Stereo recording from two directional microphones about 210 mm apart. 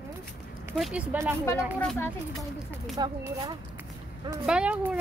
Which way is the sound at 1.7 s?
10° left (ahead or behind).